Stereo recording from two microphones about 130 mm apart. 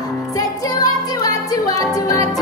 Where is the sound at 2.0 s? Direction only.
25° left (ahead or behind).